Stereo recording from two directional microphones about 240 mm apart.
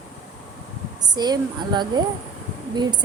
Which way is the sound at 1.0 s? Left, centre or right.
Centre.